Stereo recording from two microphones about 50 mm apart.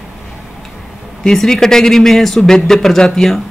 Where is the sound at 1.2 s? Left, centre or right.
Centre.